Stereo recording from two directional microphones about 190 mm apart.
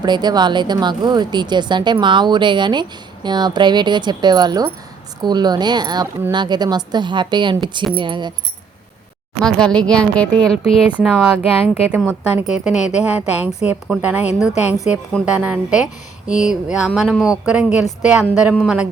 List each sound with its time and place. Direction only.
0.0 s speech: 20° right (ahead or behind)
9.4 s a woman's voice: 5° left (ahead or behind)